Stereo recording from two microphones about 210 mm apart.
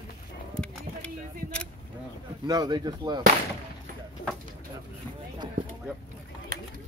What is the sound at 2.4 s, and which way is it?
Speech, 20° right (ahead or behind).